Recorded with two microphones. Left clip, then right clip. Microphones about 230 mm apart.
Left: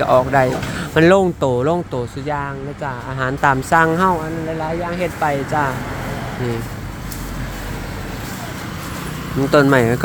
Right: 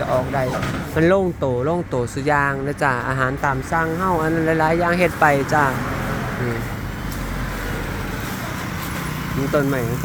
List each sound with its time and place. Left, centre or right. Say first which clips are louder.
0.0 s speech: left 7 dB; centre
1.9 s speech: right 3 dB; centre
3.4 s speech: left 7 dB; centre
4.6 s speech: right 3 dB; centre
9.5 s speech: left 8 dB; left